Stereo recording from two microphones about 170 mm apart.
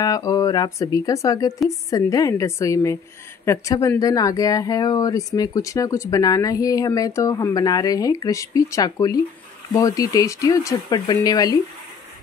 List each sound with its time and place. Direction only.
0.0 s speech: 20° left (ahead or behind)